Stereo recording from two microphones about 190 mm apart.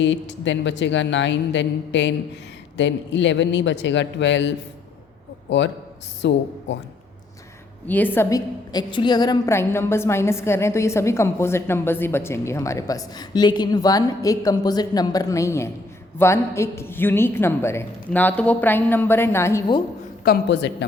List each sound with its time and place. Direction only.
0.0 s a man's voice: 70° left (ahead or behind)
7.9 s a woman's voice: 10° left (ahead or behind)
20.2 s a man's voice: 60° left (ahead or behind)